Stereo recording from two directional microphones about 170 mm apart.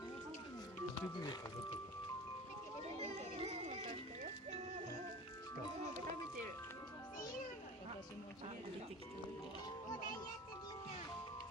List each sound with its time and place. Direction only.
1.1 s speech: 25° left (ahead or behind)
3.0 s music: 35° right (ahead or behind)